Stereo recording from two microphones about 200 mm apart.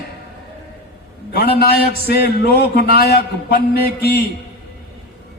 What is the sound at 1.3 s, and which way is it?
A man's voice, 50° left (ahead or behind).